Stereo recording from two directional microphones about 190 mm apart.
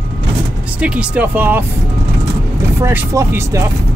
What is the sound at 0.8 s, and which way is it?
Speech, 5° right (ahead or behind).